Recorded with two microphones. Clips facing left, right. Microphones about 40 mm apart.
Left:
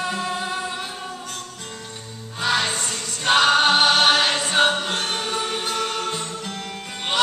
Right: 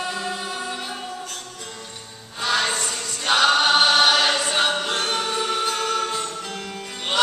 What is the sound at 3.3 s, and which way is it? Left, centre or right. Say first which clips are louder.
Choir: left 1 dB; centre.